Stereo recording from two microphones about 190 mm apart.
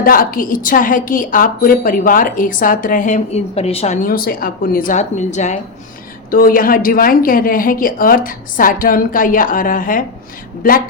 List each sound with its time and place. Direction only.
0.0 s a woman's voice: 50° left (ahead or behind)